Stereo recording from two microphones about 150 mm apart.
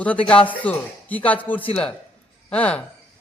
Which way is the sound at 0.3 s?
10° left (ahead or behind).